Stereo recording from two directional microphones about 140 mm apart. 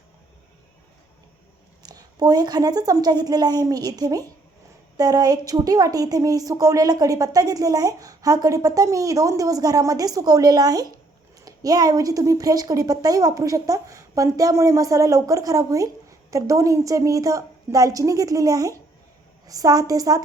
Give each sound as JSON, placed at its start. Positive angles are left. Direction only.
{"t": 1.8, "sound": "a woman's voice", "side_deg": -30}